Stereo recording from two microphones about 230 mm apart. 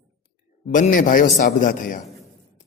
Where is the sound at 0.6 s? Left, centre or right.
Left.